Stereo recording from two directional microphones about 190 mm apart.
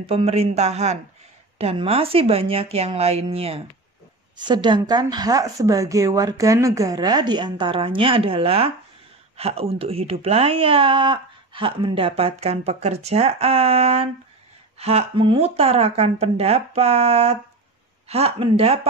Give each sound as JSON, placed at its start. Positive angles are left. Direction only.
{"t": 0.0, "sound": "speech", "side_deg": -30}